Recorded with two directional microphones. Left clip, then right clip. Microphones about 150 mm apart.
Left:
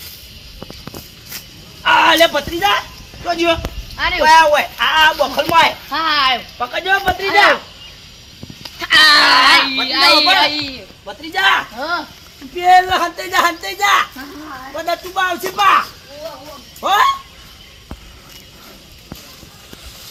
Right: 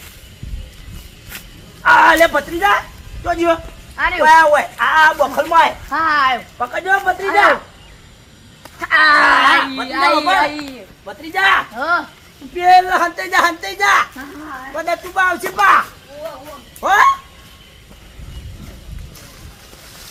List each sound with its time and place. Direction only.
1.8 s speech: centre (ahead or behind)
3.9 s speech: 15° left (ahead or behind)
4.2 s speech: centre (ahead or behind)
5.9 s speech: 10° left (ahead or behind)
8.6 s goat: 5° left (ahead or behind)
9.9 s speech: 10° left (ahead or behind)
10.2 s a child's voice: 15° right (ahead or behind)
10.4 s speech: 10° left (ahead or behind)
11.0 s speech: 10° right (ahead or behind)
14.8 s speech: 5° right (ahead or behind)